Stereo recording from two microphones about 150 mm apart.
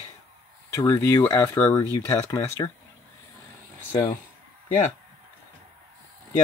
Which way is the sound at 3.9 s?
35° left (ahead or behind).